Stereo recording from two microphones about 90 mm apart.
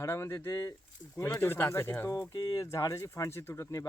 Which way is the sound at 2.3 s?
45° left (ahead or behind).